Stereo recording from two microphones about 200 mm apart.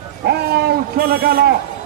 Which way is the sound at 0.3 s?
50° right (ahead or behind).